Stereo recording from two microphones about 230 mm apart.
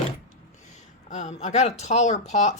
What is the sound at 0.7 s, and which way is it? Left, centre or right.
Speech, left.